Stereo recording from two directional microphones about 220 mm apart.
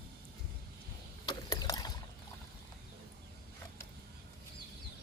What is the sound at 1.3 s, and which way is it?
Mechanisms, 15° left (ahead or behind).